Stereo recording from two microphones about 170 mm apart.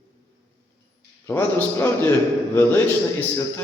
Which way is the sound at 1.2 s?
10° left (ahead or behind).